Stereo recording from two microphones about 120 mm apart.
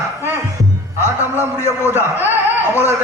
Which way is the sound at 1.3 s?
20° left (ahead or behind).